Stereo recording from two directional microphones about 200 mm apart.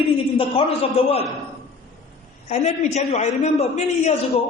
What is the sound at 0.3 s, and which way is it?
Speech, 30° left (ahead or behind).